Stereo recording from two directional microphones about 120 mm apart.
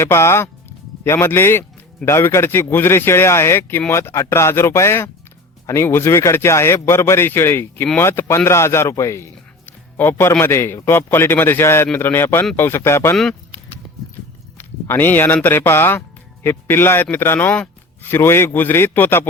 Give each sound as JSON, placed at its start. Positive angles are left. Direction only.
{"t": 0.0, "sound": "speech", "side_deg": 20}
{"t": 14.6, "sound": "speech", "side_deg": 15}